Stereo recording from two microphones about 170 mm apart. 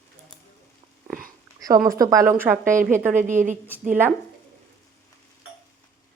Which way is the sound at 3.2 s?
50° right (ahead or behind).